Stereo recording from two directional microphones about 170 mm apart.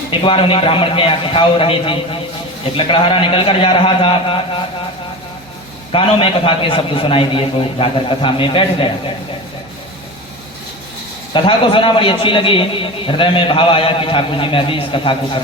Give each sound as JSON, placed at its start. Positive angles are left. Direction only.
{"t": 0.1, "sound": "a man's voice", "side_deg": 30}
{"t": 5.9, "sound": "a man's voice", "side_deg": 30}
{"t": 11.3, "sound": "a man's voice", "side_deg": 30}